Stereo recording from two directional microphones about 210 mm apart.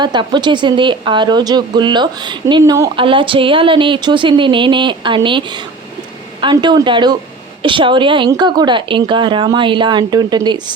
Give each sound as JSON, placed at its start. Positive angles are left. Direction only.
{"t": 0.0, "sound": "speech", "side_deg": -20}